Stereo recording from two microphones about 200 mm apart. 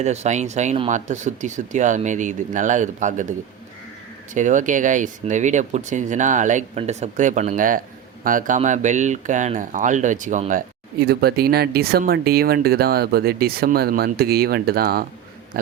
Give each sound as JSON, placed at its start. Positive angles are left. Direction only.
{"t": 0.0, "sound": "speech", "side_deg": -35}
{"t": 4.4, "sound": "speech", "side_deg": -40}
{"t": 11.0, "sound": "speech", "side_deg": -50}